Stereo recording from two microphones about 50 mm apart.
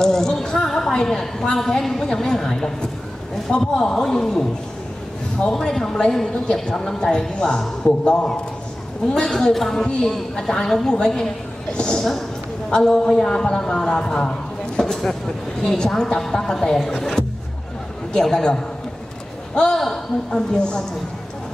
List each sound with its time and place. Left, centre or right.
0.0 s a sound: centre
1.0 s a man's voice: centre
18.1 s a man's voice: centre